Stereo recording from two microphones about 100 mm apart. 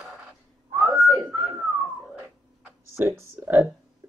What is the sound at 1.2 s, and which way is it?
Whistling, 25° right (ahead or behind).